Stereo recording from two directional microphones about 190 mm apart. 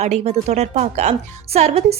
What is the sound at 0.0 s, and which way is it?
Speech, 35° right (ahead or behind).